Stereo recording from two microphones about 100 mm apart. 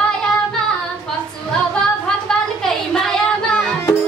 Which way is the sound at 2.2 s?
5° left (ahead or behind).